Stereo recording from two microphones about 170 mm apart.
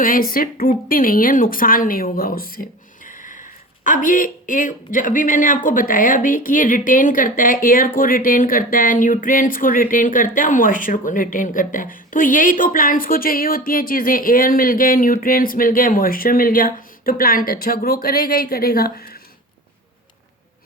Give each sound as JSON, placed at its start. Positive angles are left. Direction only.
{"t": 0.0, "sound": "a woman's voice", "side_deg": 55}